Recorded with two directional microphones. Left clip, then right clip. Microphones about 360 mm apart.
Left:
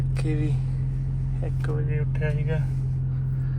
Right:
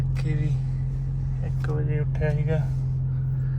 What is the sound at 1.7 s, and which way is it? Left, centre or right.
Speech, centre.